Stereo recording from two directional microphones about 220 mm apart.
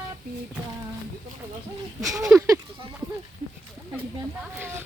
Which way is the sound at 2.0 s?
15° right (ahead or behind).